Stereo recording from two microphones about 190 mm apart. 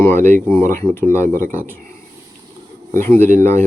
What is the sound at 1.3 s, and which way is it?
Speech, 45° right (ahead or behind).